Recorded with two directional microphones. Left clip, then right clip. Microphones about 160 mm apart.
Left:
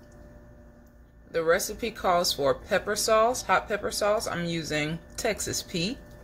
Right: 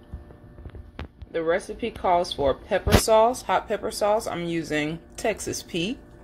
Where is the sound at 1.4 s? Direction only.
5° right (ahead or behind).